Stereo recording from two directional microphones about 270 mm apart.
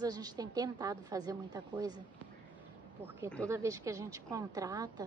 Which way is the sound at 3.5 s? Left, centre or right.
Centre.